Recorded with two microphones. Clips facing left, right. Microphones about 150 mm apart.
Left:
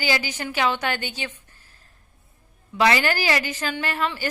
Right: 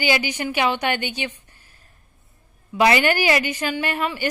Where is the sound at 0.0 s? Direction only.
15° right (ahead or behind).